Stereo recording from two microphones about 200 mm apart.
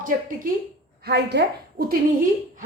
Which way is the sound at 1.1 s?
55° right (ahead or behind).